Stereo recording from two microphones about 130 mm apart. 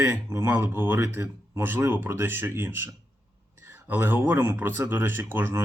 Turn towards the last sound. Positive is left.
turn(degrees=-15)  # may be behind; listen again after turning